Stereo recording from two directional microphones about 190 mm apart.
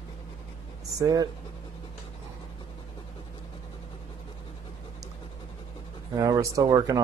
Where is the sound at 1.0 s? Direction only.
20° right (ahead or behind).